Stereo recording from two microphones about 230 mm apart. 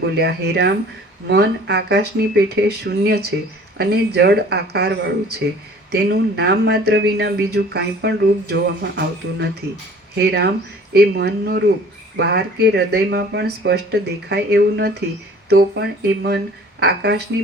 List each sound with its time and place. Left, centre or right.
0.0 s speech: right